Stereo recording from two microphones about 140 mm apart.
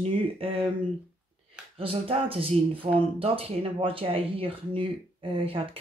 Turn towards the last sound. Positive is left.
turn(degrees=-40)  # may be behind; listen again after turning